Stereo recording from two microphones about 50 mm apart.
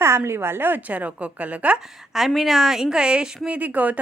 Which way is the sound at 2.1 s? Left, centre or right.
Centre.